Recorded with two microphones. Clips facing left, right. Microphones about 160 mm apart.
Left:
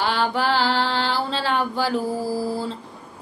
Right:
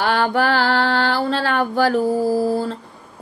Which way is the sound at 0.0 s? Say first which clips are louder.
Right 4 dB; 55° right (ahead or behind).